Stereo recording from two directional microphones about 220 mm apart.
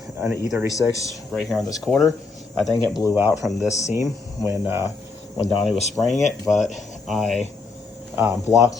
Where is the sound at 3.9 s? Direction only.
15° right (ahead or behind).